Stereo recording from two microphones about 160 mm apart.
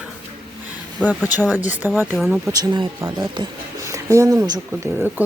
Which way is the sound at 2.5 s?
25° right (ahead or behind).